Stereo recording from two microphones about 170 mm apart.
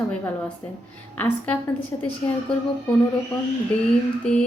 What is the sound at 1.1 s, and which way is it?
Speech, 10° left (ahead or behind).